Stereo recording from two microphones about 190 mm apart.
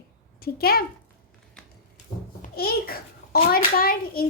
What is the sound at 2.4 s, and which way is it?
A child's voice, 55° left (ahead or behind).